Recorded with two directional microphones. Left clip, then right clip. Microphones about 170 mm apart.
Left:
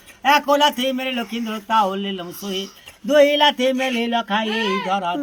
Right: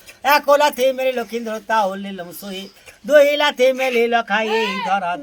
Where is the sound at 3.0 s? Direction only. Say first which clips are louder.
Right 2 dB; 90° right.